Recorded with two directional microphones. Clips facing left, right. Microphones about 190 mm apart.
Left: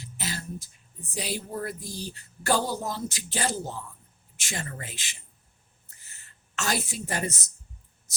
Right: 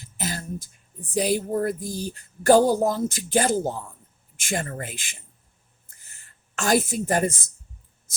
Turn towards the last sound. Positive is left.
turn(degrees=-50)  # may be behind; listen again after turning